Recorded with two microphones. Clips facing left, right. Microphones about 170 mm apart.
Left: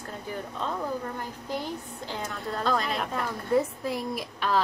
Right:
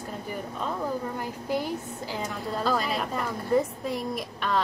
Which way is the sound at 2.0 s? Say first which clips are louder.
Even; 5° right (ahead or behind).